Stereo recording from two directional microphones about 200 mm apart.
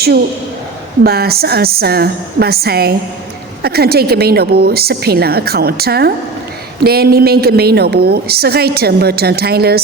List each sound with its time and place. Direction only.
1.0 s a woman's voice: 50° right (ahead or behind)